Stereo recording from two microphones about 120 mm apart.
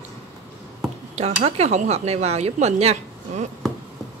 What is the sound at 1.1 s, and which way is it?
Speech, 65° right (ahead or behind).